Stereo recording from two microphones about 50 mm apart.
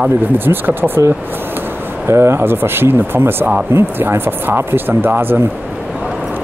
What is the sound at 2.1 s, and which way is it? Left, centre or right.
Speech, right.